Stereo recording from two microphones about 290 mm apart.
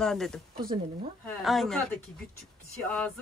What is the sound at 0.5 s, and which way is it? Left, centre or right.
Speech, right.